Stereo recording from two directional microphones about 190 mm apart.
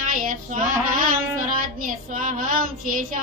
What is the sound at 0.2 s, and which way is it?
Music, 45° right (ahead or behind).